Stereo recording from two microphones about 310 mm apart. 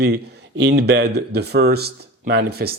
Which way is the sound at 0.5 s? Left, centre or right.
Right.